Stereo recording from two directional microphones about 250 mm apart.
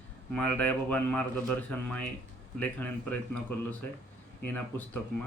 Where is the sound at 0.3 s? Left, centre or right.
Centre.